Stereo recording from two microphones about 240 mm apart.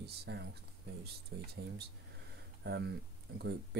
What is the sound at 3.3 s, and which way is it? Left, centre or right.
Speech, right.